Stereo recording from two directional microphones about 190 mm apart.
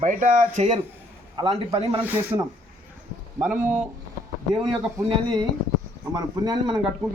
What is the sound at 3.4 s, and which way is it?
Speech, 10° right (ahead or behind).